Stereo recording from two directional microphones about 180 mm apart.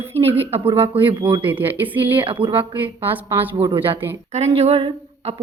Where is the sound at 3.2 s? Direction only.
15° right (ahead or behind).